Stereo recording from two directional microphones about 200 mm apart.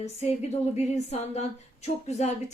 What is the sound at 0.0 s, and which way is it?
Speech, 35° left (ahead or behind).